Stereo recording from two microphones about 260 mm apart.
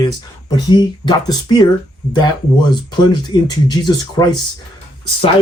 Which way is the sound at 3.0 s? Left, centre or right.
Centre.